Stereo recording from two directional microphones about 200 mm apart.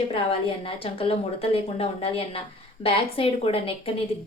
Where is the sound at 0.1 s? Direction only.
25° left (ahead or behind).